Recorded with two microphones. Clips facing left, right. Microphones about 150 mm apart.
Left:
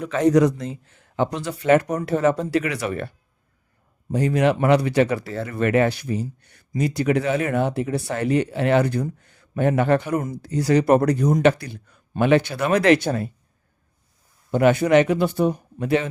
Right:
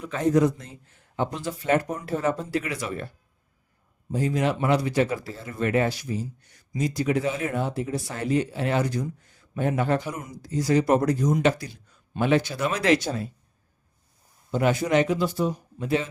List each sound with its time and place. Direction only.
0.0 s speech: 90° left; by 3.1 s 65° left (ahead or behind)
4.1 s speech: 70° left (ahead or behind)
14.5 s speech: 60° left (ahead or behind)